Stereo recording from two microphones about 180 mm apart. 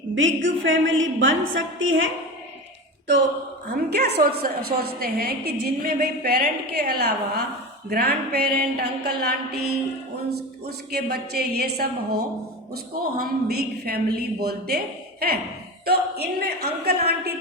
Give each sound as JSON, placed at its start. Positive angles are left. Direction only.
{"t": 0.2, "sound": "a woman's voice", "side_deg": -90}
{"t": 3.7, "sound": "a woman's voice", "side_deg": -65}
{"t": 15.9, "sound": "a woman's voice", "side_deg": -65}